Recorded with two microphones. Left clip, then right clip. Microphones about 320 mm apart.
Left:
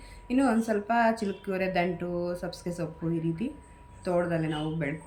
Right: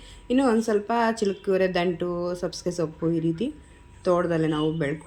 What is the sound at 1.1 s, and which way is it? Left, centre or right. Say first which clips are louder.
Speech: right 8 dB; centre.